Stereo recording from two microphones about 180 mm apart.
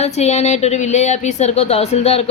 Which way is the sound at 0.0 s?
35° left (ahead or behind).